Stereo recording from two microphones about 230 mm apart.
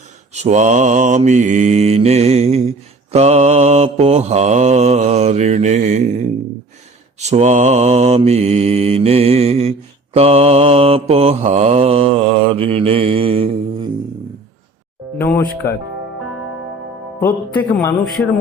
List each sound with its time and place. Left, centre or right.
0.3 s mantra: right
15.6 s music: centre
17.2 s music: centre